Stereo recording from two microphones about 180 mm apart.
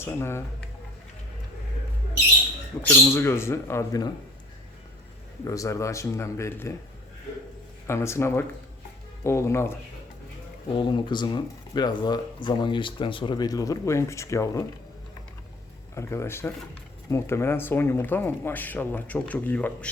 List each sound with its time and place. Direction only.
0.0 s speech: 15° left (ahead or behind)
2.9 s speech: 15° left (ahead or behind)
5.5 s speech: 15° left (ahead or behind)
7.9 s speech: 15° left (ahead or behind)
10.8 s speech: 25° left (ahead or behind)
16.0 s speech: 15° left (ahead or behind)